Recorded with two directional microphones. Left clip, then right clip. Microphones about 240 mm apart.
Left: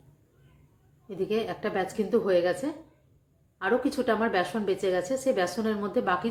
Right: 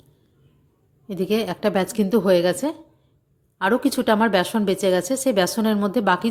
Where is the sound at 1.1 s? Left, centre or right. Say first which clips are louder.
Right 6 dB; right.